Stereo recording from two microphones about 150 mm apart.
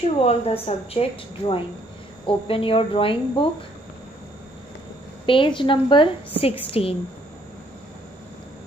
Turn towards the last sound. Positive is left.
turn(degrees=40)  # may be behind; listen again after turning